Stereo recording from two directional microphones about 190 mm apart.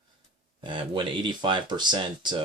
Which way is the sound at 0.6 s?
25° right (ahead or behind).